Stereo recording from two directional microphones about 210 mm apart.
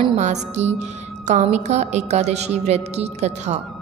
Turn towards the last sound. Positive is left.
turn(degrees=-30)  # may be behind; listen again after turning